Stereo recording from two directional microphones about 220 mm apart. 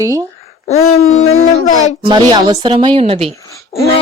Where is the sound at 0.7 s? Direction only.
30° left (ahead or behind).